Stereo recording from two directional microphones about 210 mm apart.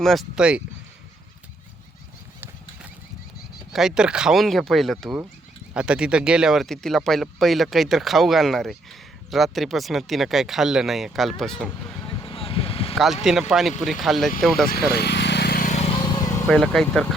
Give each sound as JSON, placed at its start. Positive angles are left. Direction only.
{"t": 0.0, "sound": "speech", "side_deg": 0}
{"t": 3.7, "sound": "speech", "side_deg": 0}
{"t": 12.0, "sound": "vehicle", "side_deg": 25}
{"t": 13.5, "sound": "speech", "side_deg": 0}
{"t": 14.7, "sound": "vehicle", "side_deg": 50}
{"t": 16.5, "sound": "speech", "side_deg": 0}